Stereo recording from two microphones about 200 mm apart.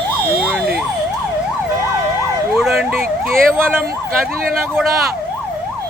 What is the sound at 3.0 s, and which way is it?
Emergency vehicle, 45° right (ahead or behind).